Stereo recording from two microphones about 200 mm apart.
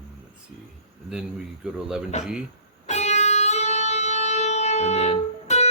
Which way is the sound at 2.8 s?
35° left (ahead or behind).